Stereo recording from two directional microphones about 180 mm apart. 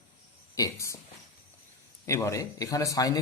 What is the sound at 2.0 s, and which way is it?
Speech, 15° left (ahead or behind).